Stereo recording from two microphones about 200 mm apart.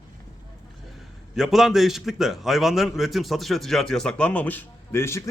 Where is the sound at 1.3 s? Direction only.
Centre (ahead or behind).